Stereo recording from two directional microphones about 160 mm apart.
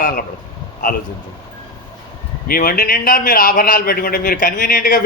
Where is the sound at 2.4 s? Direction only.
65° left (ahead or behind).